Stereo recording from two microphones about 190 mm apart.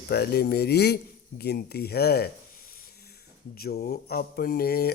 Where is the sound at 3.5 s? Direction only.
50° left (ahead or behind).